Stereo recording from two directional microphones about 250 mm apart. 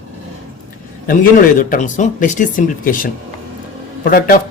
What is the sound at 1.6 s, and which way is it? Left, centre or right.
Speech, left.